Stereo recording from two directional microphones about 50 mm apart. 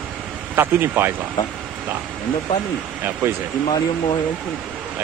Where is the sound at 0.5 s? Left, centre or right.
Right.